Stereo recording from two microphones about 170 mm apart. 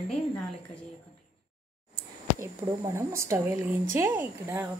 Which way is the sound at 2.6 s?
20° right (ahead or behind).